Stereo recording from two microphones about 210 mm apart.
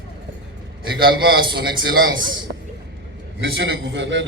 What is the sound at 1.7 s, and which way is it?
Speech, 20° right (ahead or behind).